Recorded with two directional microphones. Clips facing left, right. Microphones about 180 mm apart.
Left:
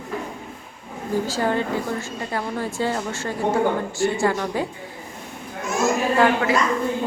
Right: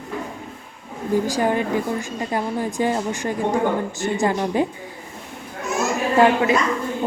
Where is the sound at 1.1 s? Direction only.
15° right (ahead or behind).